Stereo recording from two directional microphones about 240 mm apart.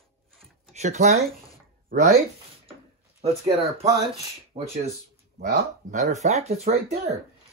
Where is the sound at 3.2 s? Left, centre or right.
Right.